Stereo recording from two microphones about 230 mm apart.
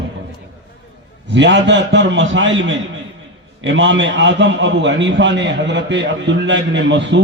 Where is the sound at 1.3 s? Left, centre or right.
Right.